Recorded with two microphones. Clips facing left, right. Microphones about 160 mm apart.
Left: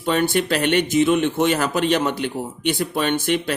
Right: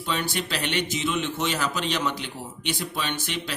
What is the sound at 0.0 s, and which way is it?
A man's voice, 50° left (ahead or behind).